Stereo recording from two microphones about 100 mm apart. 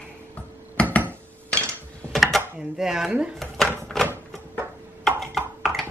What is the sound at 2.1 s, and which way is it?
Computer keyboard, centre (ahead or behind).